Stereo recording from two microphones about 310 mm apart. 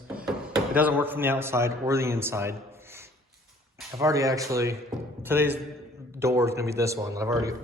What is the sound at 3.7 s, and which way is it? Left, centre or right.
Speech, centre.